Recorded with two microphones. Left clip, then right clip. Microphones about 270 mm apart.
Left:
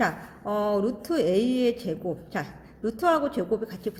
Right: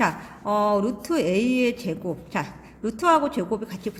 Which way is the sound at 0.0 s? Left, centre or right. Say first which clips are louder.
Right 3 dB; centre.